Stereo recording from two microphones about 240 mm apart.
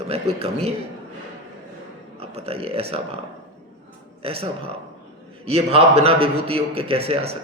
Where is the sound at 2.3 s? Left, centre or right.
Right.